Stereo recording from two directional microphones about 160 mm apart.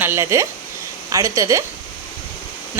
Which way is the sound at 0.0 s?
15° right (ahead or behind).